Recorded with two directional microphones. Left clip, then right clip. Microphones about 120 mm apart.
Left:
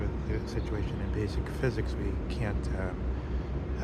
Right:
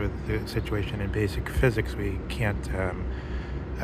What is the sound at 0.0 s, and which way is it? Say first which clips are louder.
Speech: right 5 dB; 55° right (ahead or behind).